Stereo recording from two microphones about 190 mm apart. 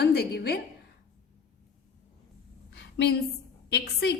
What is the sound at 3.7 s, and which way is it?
Speech, 60° left (ahead or behind).